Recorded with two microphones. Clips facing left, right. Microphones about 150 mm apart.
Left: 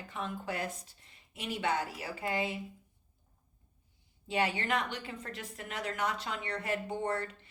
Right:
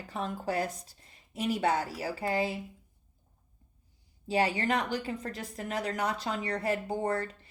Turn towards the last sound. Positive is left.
turn(degrees=-35)  # may be behind; listen again after turning